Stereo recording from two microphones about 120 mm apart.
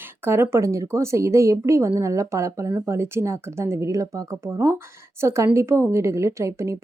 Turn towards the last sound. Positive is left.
turn(degrees=-25)  # may be behind; listen again after turning